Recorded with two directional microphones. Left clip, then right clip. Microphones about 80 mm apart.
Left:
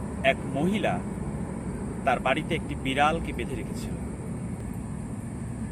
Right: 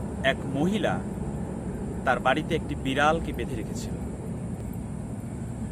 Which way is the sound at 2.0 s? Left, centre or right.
Right.